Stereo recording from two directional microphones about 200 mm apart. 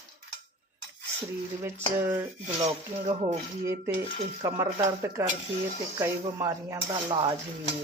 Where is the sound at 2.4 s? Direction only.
35° right (ahead or behind).